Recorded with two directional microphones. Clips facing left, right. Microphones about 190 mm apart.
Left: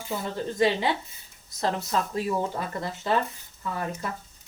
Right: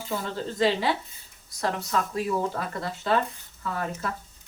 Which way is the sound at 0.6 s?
20° left (ahead or behind).